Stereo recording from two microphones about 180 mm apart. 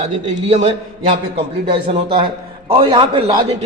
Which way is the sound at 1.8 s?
30° right (ahead or behind).